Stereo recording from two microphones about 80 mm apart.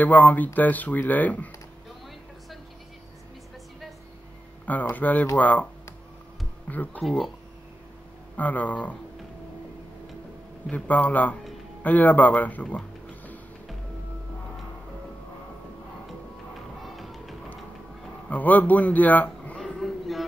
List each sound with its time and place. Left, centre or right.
0.0 s speech: left
4.6 s speech: centre
6.7 s speech: left
7.0 s speech: centre
8.4 s speech: centre
10.7 s speech: centre
16.8 s music: centre
18.3 s a man's voice: centre
19.6 s a sound: centre